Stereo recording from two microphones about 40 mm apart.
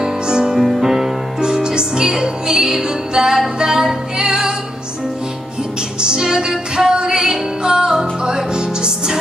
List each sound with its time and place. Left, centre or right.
0.0 s music: centre
0.6 s music: centre
5.9 s music: centre